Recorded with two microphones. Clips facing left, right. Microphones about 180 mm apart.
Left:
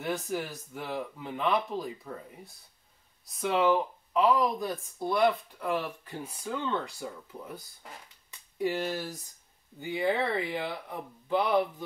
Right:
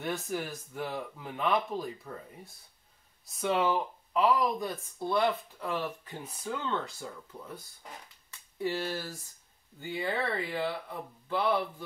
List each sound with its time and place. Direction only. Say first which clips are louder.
0.0 s speech: left 2 dB; centre (ahead or behind)
3.3 s speech: left 3 dB; centre (ahead or behind)
5.6 s speech: left 2 dB; 10° left (ahead or behind)
8.3 s speech: left 3 dB; 15° left (ahead or behind)